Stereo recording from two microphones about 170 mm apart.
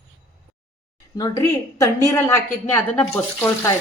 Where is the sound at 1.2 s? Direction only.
20° left (ahead or behind).